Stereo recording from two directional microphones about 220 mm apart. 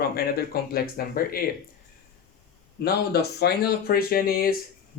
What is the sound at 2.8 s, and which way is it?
Speech, 45° left (ahead or behind).